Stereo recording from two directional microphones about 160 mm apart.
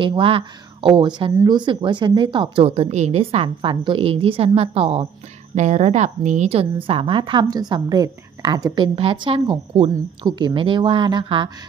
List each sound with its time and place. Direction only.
0.0 s a woman's voice: 35° right (ahead or behind)